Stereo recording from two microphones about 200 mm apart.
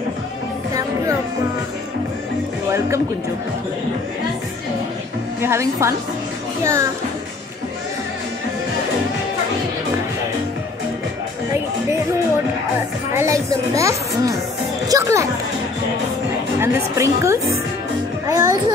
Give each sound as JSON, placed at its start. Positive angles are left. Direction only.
{"t": 5.4, "sound": "speech", "side_deg": -15}
{"t": 13.1, "sound": "speech", "side_deg": -15}
{"t": 16.5, "sound": "speech", "side_deg": -15}